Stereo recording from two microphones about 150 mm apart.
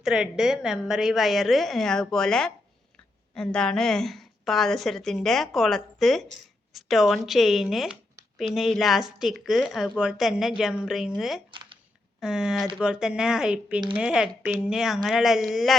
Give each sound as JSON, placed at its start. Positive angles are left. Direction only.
{"t": 0.0, "sound": "a woman's voice", "side_deg": -5}
{"t": 11.5, "sound": "a sound", "side_deg": -35}
{"t": 12.2, "sound": "a woman's voice", "side_deg": -5}